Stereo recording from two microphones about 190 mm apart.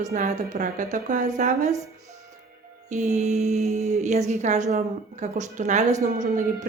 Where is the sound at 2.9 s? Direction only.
35° right (ahead or behind).